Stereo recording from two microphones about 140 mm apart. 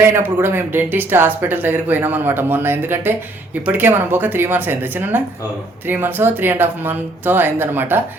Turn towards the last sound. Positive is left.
turn(degrees=-15)  # may be behind; listen again after turning